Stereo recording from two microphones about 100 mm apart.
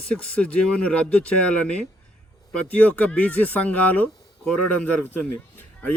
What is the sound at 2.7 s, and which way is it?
Speech, 15° left (ahead or behind).